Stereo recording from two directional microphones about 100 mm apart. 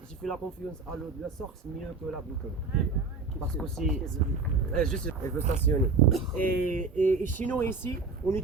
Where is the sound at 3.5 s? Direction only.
5° left (ahead or behind).